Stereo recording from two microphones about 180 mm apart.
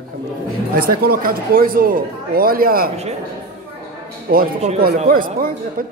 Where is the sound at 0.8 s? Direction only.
55° right (ahead or behind).